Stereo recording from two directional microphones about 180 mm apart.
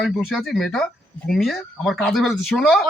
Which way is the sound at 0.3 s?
Centre (ahead or behind).